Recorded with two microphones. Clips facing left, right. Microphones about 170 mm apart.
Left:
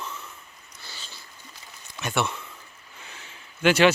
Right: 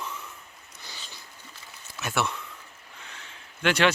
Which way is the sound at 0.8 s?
15° right (ahead or behind).